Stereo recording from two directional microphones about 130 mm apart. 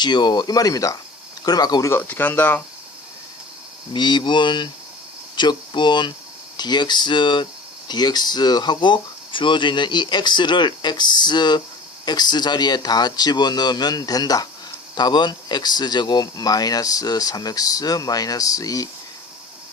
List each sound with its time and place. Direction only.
0.0 s speech: 35° left (ahead or behind)
1.9 s speech: 15° left (ahead or behind)
3.9 s speech: 35° left (ahead or behind)